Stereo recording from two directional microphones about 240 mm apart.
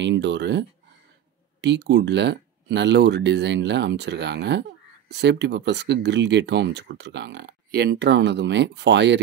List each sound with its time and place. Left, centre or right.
0.0 s speech: right